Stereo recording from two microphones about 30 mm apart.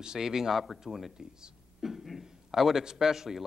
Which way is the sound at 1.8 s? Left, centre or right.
Centre.